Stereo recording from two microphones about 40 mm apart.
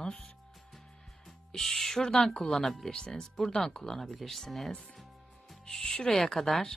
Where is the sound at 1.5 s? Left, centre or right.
Centre.